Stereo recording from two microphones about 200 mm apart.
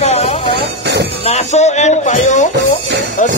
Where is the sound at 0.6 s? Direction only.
60° right (ahead or behind).